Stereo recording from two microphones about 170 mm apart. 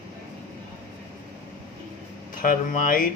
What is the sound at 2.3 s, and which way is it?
Speech, 55° left (ahead or behind).